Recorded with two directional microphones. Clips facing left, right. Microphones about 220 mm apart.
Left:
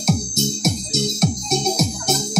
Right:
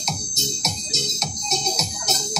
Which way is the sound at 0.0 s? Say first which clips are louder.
Left 11 dB; 50° left (ahead or behind).